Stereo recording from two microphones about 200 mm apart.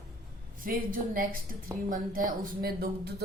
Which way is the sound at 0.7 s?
45° right (ahead or behind).